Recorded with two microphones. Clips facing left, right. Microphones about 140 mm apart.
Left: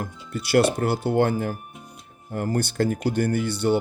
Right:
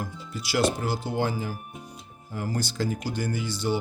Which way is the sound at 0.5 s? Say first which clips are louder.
Left 5 dB; 60° left (ahead or behind).